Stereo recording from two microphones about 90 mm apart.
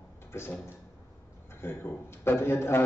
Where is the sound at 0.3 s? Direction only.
25° left (ahead or behind).